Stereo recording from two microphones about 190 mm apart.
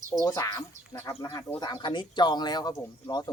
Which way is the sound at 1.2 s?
20° left (ahead or behind).